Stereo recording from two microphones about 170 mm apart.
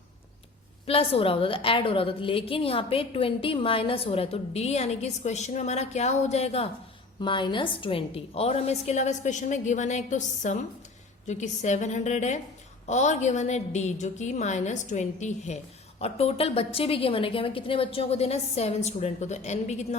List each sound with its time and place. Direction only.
0.9 s a woman's voice: 35° left (ahead or behind)
7.2 s a woman's voice: 30° left (ahead or behind)